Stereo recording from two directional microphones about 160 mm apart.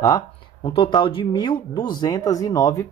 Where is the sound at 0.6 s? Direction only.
30° left (ahead or behind).